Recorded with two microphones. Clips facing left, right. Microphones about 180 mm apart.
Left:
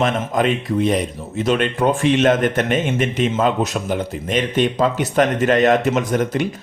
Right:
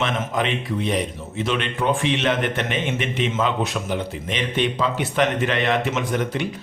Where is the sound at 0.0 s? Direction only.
45° left (ahead or behind).